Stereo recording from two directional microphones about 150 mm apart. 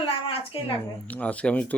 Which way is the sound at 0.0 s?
40° left (ahead or behind).